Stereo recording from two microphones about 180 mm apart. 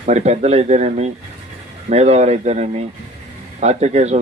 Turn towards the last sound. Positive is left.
turn(degrees=-40)  # may be behind; listen again after turning